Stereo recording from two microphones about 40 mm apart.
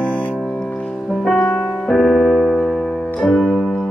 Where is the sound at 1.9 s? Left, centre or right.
Centre.